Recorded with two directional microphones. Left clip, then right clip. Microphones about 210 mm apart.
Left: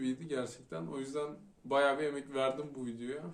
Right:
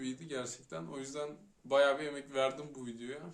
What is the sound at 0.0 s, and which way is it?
Speech, 10° right (ahead or behind).